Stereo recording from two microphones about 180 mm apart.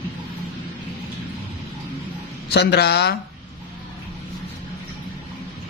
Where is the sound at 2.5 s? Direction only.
65° left (ahead or behind).